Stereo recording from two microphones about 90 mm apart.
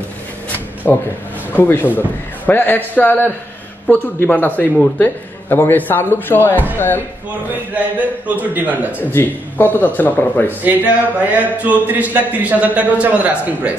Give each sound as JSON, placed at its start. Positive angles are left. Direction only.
{"t": 0.8, "sound": "a man's voice", "side_deg": 25}
{"t": 7.7, "sound": "speech", "side_deg": -15}
{"t": 9.1, "sound": "a man's voice", "side_deg": 20}
{"t": 10.6, "sound": "speech", "side_deg": -15}